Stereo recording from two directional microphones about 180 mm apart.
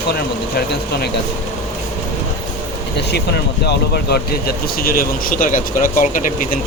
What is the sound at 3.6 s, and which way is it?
Speech, 65° left (ahead or behind).